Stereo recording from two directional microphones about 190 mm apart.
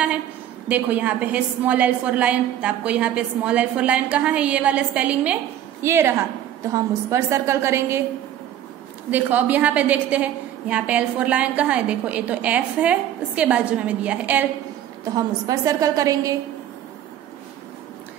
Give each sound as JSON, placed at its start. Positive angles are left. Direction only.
{"t": 0.7, "sound": "a woman's voice", "side_deg": -10}
{"t": 9.1, "sound": "a woman's voice", "side_deg": -10}
{"t": 15.1, "sound": "a woman's voice", "side_deg": -20}